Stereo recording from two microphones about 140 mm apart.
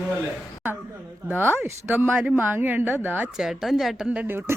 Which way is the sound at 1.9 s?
10° right (ahead or behind).